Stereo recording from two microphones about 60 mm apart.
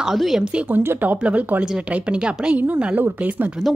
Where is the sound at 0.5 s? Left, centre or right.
Right.